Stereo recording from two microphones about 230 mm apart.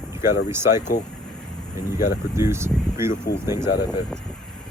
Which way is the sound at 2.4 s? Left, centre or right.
Centre.